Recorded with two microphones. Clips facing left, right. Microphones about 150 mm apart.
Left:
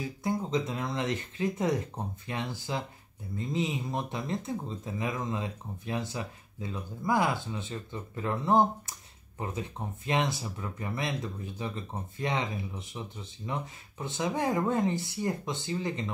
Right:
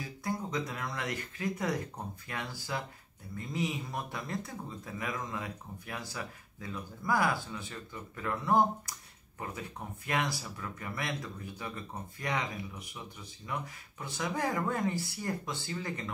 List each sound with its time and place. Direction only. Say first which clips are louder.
0.2 s speech: left 5 dB; 25° left (ahead or behind)